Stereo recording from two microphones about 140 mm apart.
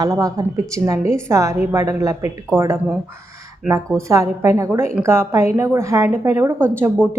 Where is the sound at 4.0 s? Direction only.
20° right (ahead or behind).